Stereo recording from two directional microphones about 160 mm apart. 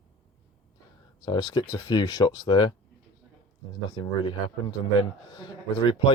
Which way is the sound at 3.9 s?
30° left (ahead or behind).